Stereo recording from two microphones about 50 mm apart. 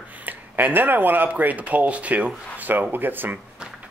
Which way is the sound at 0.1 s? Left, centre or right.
Right.